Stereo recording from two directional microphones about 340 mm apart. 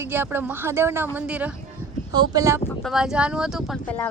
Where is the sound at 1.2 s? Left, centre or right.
Centre.